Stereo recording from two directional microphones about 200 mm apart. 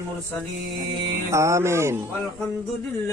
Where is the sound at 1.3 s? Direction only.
15° right (ahead or behind).